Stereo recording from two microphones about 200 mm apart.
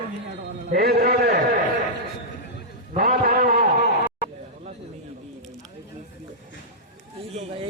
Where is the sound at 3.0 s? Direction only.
50° right (ahead or behind).